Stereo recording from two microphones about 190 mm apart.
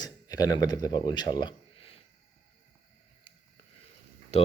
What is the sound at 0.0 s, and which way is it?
Speech, 20° left (ahead or behind).